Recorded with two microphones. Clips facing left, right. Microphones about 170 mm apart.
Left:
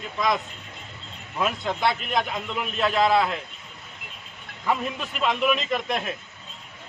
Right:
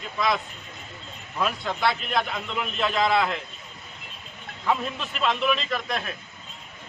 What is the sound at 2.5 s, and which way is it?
Speech, 5° left (ahead or behind).